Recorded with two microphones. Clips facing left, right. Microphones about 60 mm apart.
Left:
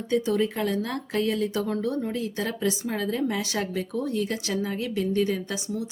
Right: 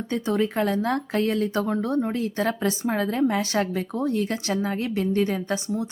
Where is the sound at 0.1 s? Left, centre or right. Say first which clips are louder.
Left 1 dB; right.